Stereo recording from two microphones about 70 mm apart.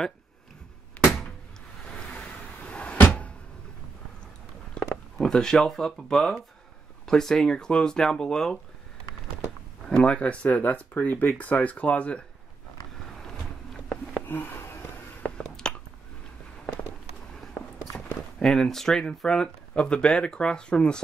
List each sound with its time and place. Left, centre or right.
1.9 s cupboard open or close: centre
5.1 s speech: centre
9.8 s speech: centre
14.2 s a sound: left
15.2 s a sound: centre
18.4 s speech: centre